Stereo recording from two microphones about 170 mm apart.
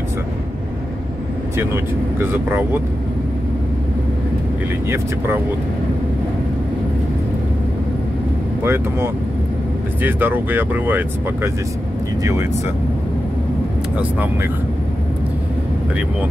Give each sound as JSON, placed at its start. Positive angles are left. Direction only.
{"t": 2.1, "sound": "speech", "side_deg": -15}
{"t": 4.8, "sound": "speech", "side_deg": -15}
{"t": 8.6, "sound": "speech", "side_deg": -15}